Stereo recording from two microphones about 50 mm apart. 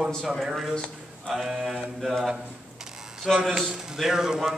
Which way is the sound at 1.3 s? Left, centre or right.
Centre.